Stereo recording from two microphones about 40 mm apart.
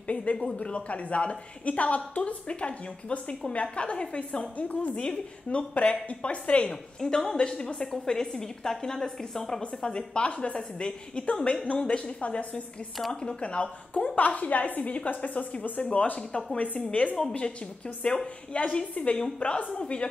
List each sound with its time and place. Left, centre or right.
0.0 s a woman's voice: left
5.0 s a woman's voice: left
6.7 s a woman's voice: centre
9.8 s a woman's voice: left
13.1 s a woman's voice: left
16.2 s a woman's voice: left
16.5 s a woman's voice: left